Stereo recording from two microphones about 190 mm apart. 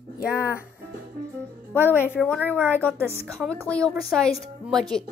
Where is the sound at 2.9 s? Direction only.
10° right (ahead or behind).